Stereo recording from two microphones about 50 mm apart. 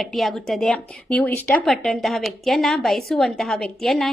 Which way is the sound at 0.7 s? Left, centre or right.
Left.